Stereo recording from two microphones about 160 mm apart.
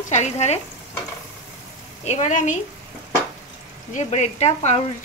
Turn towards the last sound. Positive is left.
turn(degrees=45)  # may be behind; listen again after turning